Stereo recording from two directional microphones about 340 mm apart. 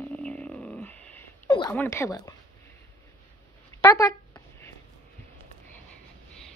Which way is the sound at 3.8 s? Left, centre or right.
Centre.